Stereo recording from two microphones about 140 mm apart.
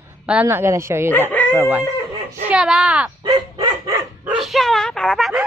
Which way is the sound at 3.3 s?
25° right (ahead or behind).